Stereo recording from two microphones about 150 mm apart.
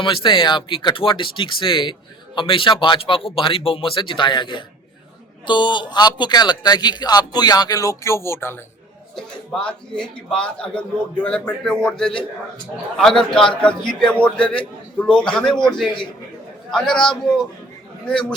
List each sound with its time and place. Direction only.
0.0 s speech: 35° left (ahead or behind); by 8.5 s 15° left (ahead or behind)
9.1 s a man's voice: 5° left (ahead or behind)
15.5 s speech: 30° left (ahead or behind)
16.7 s a man's voice: 5° left (ahead or behind)